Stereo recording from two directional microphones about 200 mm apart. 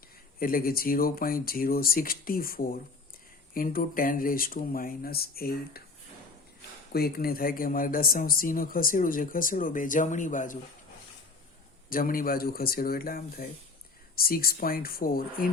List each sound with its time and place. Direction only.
0.3 s speech: 45° left (ahead or behind)
6.9 s speech: 50° left (ahead or behind)
11.9 s speech: 45° left (ahead or behind)